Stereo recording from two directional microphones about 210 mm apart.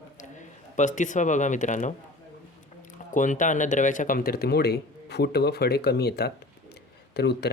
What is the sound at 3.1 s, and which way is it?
Speech, 35° left (ahead or behind).